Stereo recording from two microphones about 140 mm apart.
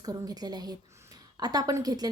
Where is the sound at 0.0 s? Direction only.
30° right (ahead or behind).